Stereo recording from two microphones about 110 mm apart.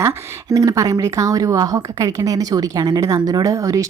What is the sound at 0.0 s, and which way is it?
Speech, 30° right (ahead or behind).